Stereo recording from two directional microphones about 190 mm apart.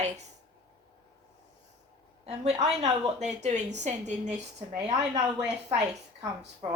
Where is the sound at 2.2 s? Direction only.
35° right (ahead or behind).